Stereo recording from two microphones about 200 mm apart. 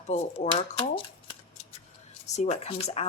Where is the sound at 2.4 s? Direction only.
30° left (ahead or behind).